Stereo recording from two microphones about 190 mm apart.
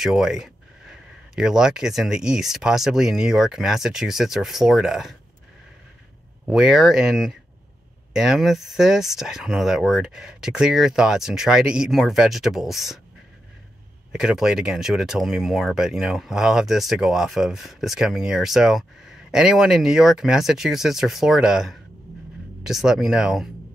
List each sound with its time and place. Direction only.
0.0 s speech: centre (ahead or behind)
6.4 s speech: centre (ahead or behind)
14.1 s speech: centre (ahead or behind)